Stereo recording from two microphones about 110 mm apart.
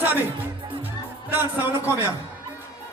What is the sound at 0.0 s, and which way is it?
Music, 15° right (ahead or behind).